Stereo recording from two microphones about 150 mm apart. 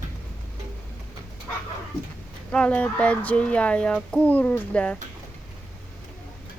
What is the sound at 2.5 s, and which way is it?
Speech, 10° left (ahead or behind).